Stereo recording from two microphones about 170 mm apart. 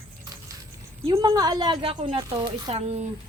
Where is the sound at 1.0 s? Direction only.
25° right (ahead or behind).